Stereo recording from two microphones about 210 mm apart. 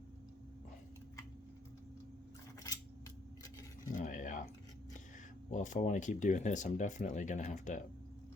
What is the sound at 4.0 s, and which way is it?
Cutlery, 40° left (ahead or behind).